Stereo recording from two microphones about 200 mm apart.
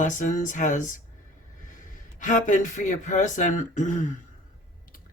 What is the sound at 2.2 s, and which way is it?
Speech, 40° left (ahead or behind).